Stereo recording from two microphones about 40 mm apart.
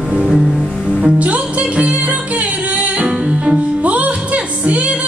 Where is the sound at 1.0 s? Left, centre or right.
Right.